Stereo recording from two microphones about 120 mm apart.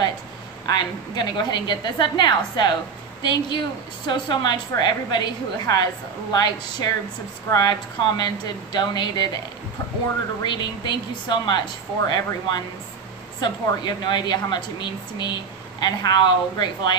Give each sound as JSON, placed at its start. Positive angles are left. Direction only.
{"t": 0.7, "sound": "speech", "side_deg": 35}
{"t": 10.4, "sound": "speech", "side_deg": 40}